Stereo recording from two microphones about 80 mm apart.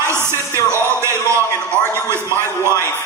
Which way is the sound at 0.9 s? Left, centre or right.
Right.